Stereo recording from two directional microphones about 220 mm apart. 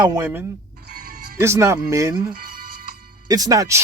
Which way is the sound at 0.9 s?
45° right (ahead or behind).